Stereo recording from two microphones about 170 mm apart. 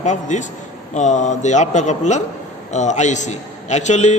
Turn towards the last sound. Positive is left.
turn(degrees=40)  # may be behind; listen again after turning